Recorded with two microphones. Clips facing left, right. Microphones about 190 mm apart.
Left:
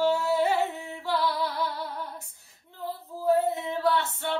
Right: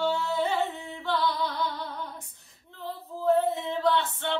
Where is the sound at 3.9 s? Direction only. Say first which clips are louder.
Even; 5° left (ahead or behind).